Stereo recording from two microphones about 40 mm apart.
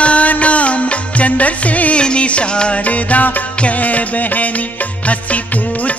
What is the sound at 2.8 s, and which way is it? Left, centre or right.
Music, left.